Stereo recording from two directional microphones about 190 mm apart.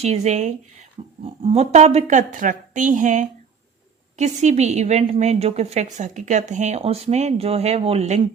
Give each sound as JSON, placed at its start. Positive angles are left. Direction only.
{"t": 0.0, "sound": "a woman's voice", "side_deg": -35}